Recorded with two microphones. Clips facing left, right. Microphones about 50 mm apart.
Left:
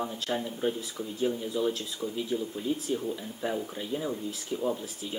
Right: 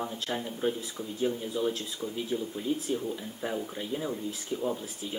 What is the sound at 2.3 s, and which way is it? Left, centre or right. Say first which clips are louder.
Speech: left 1 dB; centre.